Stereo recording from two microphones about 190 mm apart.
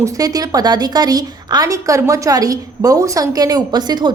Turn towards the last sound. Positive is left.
turn(degrees=-20)  # may be behind; listen again after turning